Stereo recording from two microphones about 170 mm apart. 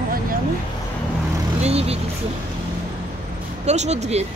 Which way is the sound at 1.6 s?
35° right (ahead or behind).